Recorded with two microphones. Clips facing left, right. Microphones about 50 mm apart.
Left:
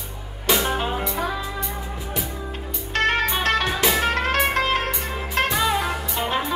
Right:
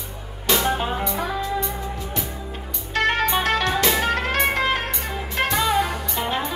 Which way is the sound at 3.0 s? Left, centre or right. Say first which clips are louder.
Right 1 dB; right.